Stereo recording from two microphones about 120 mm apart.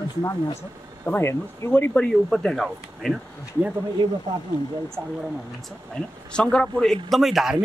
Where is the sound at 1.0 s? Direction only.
20° left (ahead or behind).